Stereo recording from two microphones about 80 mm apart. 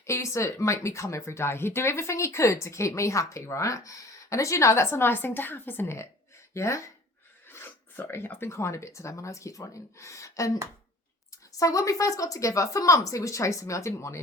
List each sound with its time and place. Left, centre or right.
0.0 s speech: left
7.4 s speech: left